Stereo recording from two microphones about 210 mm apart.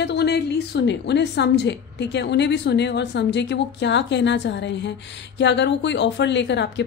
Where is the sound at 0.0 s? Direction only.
55° left (ahead or behind).